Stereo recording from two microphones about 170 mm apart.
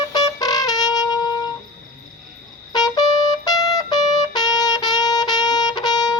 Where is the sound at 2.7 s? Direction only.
25° left (ahead or behind).